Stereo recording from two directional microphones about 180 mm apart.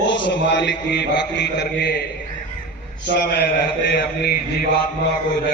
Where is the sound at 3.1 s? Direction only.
65° left (ahead or behind).